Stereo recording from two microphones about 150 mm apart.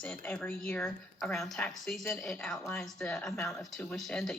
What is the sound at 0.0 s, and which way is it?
Speech, 10° left (ahead or behind).